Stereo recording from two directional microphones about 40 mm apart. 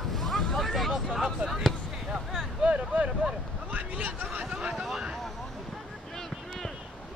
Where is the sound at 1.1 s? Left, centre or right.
Centre.